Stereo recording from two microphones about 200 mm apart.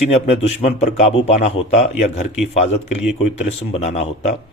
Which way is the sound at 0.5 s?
35° left (ahead or behind).